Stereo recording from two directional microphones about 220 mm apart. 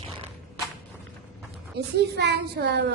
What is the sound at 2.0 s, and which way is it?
Speech, 50° right (ahead or behind).